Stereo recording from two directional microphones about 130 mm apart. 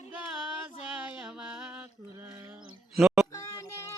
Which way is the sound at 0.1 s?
10° right (ahead or behind).